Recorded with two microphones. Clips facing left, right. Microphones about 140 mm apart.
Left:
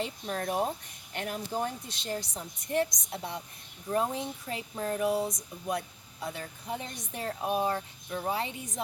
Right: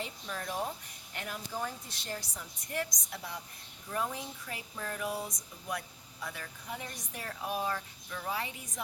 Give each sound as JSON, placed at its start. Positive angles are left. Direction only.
{"t": 0.3, "sound": "speech", "side_deg": 55}
{"t": 1.3, "sound": "speech", "side_deg": 25}